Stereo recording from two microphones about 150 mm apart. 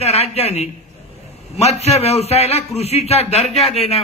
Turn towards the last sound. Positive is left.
turn(degrees=40)  # may be behind; listen again after turning